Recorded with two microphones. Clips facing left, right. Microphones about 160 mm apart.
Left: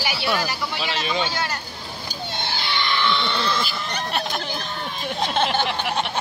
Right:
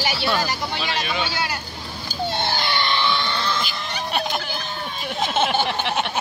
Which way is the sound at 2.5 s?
45° right (ahead or behind).